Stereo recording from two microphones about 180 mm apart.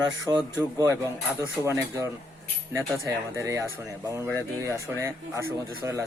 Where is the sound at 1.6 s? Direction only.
15° right (ahead or behind).